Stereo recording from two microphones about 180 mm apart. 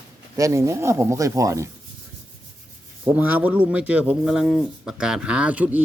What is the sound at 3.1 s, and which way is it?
A man's voice, 10° right (ahead or behind).